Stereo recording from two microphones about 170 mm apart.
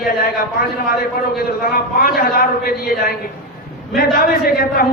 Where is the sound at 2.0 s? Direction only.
60° left (ahead or behind).